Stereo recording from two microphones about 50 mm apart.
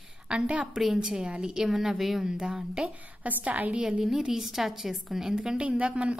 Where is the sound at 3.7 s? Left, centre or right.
Centre.